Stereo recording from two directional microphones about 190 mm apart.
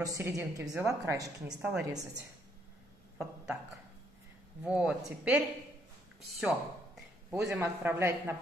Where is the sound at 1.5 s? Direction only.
5° right (ahead or behind).